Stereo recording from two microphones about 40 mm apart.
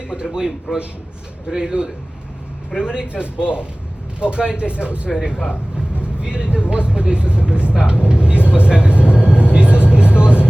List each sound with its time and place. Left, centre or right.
0.1 s a man's voice: centre
9.2 s vehicle: left
9.5 s vehicle: right